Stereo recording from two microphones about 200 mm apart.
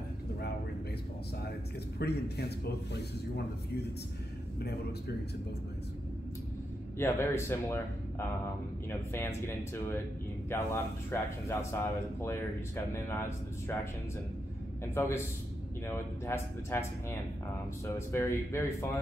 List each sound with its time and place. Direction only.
2.0 s speech: 55° left (ahead or behind)
7.0 s speech: 10° left (ahead or behind)
9.1 s speech: 15° left (ahead or behind)
10.5 s speech: 15° left (ahead or behind)
15.0 s speech: 15° left (ahead or behind)
17.8 s speech: 15° left (ahead or behind)